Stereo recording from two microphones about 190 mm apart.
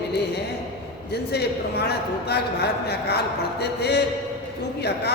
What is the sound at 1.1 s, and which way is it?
A man's voice, 60° left (ahead or behind).